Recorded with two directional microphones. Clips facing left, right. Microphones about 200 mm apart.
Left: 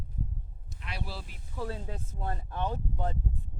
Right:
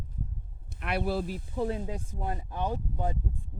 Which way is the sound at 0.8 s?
60° right (ahead or behind).